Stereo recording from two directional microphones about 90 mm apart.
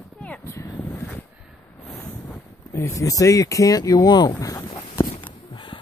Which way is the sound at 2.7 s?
35° left (ahead or behind).